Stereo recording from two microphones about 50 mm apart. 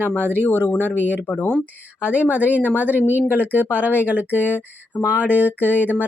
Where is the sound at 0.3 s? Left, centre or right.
Left.